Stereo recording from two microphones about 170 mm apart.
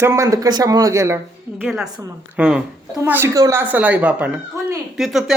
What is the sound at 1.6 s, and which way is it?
A woman's voice, 5° right (ahead or behind).